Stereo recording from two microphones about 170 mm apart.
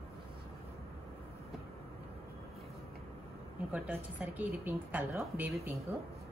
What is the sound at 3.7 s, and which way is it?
A woman's voice, 10° right (ahead or behind).